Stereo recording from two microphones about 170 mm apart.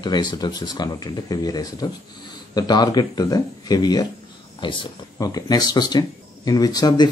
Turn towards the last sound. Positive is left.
turn(degrees=25)  # may be behind; listen again after turning